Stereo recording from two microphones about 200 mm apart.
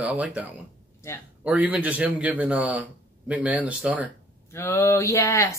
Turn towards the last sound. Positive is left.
turn(degrees=15)  # may be behind; listen again after turning